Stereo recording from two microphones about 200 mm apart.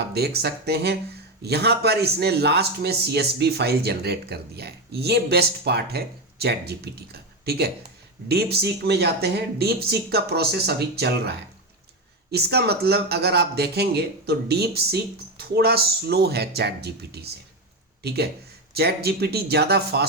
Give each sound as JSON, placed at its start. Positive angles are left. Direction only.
{"t": 0.1, "sound": "a man's voice", "side_deg": -55}
{"t": 18.7, "sound": "speech", "side_deg": -55}